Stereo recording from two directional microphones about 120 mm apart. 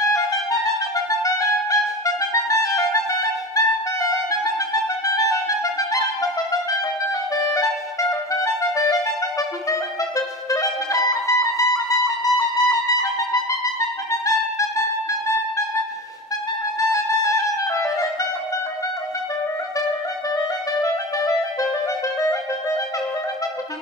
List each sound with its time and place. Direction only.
1.2 s clarinet: 30° left (ahead or behind)
8.1 s clarinet: 25° left (ahead or behind)
13.7 s music: 25° left (ahead or behind)
16.9 s music: 25° left (ahead or behind)